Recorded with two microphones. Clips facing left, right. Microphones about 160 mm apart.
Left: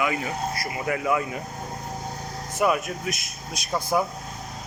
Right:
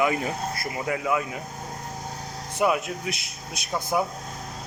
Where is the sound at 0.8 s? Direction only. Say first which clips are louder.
Left 1 dB; 15° right (ahead or behind).